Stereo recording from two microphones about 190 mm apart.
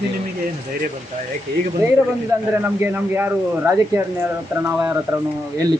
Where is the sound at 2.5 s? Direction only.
10° right (ahead or behind).